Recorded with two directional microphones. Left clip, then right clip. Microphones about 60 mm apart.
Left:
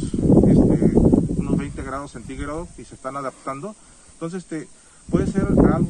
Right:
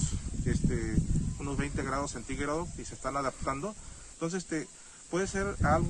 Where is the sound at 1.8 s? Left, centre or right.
Right.